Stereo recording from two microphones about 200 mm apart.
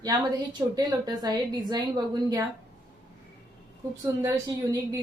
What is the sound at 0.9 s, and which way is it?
Speech, 20° right (ahead or behind).